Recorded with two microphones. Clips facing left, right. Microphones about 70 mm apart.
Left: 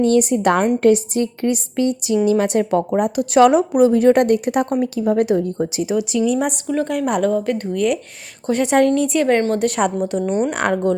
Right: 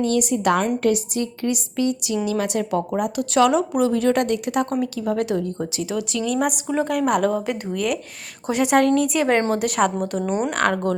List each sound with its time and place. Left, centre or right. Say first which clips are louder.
0.0 s a woman's voice: left 5 dB; left; by 6.5 s centre
6.7 s a woman's voice: even; centre
10.5 s speech: left 2 dB; centre